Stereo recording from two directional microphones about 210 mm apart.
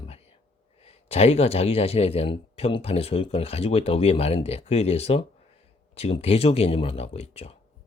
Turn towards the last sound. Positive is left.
turn(degrees=30)  # may be behind; listen again after turning